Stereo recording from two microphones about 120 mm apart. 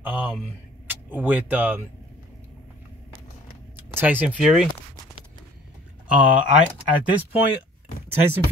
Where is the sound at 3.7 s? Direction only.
15° right (ahead or behind).